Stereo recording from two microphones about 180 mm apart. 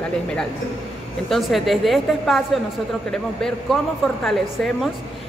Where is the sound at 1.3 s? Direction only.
Centre (ahead or behind).